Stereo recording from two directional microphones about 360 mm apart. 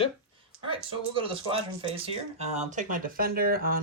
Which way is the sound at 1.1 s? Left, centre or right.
Centre.